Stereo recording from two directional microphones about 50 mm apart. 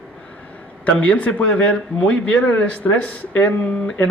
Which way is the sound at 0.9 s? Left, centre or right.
Left.